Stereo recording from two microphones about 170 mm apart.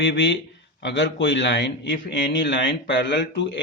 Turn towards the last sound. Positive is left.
turn(degrees=90)